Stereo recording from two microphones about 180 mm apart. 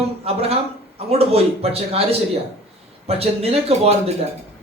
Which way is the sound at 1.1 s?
35° right (ahead or behind).